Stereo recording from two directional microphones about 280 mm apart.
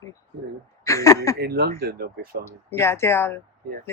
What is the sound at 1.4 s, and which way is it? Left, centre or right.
Speech, right.